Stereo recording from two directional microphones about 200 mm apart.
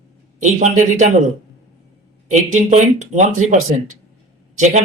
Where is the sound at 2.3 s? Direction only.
35° right (ahead or behind).